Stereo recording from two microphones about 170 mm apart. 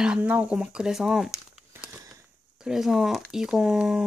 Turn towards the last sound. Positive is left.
turn(degrees=-5)  # may be behind; listen again after turning